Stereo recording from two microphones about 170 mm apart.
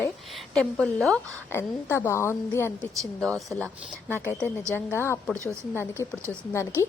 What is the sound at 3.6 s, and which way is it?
Speech, 15° right (ahead or behind).